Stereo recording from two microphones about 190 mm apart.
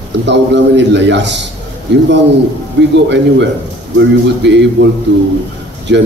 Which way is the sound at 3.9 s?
65° right (ahead or behind).